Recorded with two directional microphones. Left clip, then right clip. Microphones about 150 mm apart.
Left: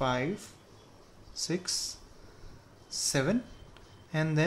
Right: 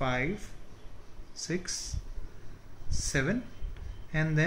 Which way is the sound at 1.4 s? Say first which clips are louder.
Left 2 dB; 90° left.